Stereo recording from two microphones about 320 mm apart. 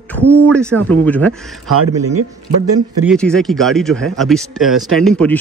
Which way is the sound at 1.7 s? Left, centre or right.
Right.